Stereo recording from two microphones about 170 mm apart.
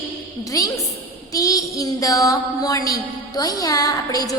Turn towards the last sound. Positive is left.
turn(degrees=20)  # may be behind; listen again after turning